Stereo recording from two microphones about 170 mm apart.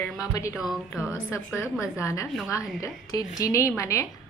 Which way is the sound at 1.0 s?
15° left (ahead or behind).